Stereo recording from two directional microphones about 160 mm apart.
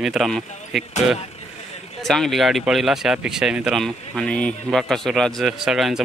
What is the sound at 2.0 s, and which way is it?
Speech, centre (ahead or behind).